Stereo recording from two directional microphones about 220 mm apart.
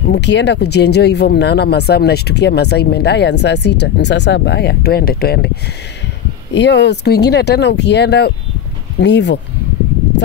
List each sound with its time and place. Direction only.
0.0 s speech: 50° left (ahead or behind)
6.5 s speech: 55° left (ahead or behind)